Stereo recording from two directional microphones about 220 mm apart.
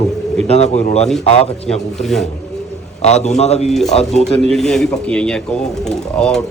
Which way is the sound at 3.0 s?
30° left (ahead or behind).